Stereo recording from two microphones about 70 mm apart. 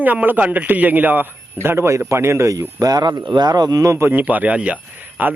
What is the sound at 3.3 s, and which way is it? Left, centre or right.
Speech, right.